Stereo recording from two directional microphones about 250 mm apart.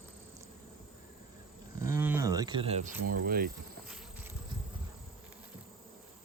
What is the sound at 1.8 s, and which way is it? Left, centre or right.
Speech, centre.